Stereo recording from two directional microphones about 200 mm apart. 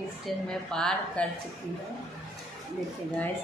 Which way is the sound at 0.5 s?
5° left (ahead or behind).